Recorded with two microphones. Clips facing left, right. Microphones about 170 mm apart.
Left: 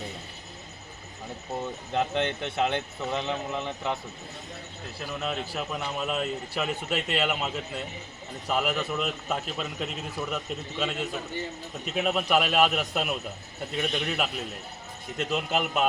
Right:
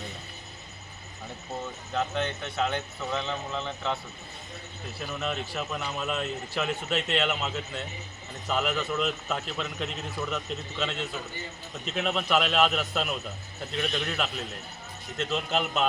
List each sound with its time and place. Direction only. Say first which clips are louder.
1.9 s speech: left 2 dB; 25° left (ahead or behind)
5.0 s a man's voice: left 1 dB; centre (ahead or behind)